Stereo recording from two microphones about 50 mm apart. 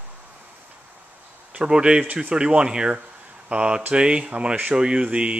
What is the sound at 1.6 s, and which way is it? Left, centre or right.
Speech, centre.